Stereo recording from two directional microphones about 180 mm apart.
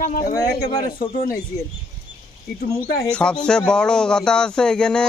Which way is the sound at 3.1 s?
5° left (ahead or behind).